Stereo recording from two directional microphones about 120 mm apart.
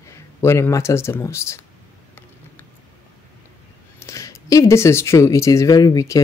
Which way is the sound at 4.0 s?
25° left (ahead or behind).